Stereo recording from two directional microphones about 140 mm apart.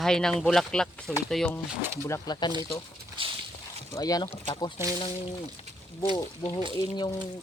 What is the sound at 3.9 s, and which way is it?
Speech, 25° left (ahead or behind).